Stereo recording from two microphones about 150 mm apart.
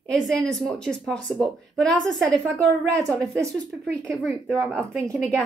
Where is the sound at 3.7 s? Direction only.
5° right (ahead or behind).